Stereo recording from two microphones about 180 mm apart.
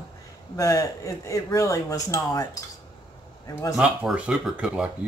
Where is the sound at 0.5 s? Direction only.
20° left (ahead or behind).